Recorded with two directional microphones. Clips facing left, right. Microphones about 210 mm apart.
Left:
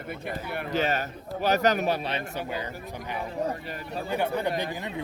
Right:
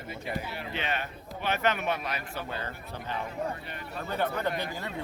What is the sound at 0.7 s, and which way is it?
A man's voice, 40° left (ahead or behind).